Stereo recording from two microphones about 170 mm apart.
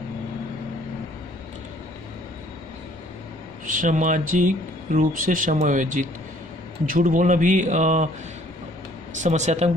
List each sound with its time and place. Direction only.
3.6 s speech: 50° right (ahead or behind)
9.2 s speech: 45° right (ahead or behind)